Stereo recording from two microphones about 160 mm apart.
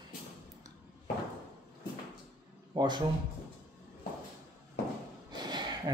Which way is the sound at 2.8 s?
25° right (ahead or behind).